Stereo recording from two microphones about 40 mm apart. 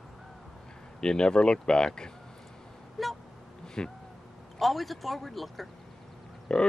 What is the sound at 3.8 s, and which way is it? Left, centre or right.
Speech, left.